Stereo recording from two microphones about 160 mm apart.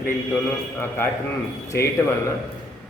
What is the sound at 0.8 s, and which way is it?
A man's voice, 15° left (ahead or behind).